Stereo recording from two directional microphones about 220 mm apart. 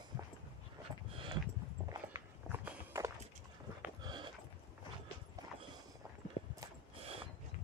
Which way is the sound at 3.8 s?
20° right (ahead or behind).